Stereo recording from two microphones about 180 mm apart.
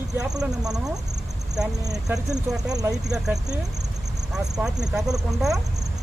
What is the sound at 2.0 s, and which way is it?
Speech, centre (ahead or behind).